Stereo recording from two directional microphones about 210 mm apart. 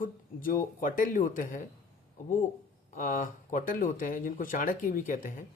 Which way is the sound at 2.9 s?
40° left (ahead or behind).